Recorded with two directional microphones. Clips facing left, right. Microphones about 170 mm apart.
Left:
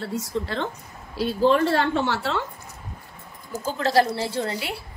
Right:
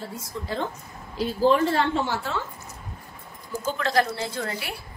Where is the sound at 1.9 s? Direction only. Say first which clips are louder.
Left 3 dB; 70° left (ahead or behind).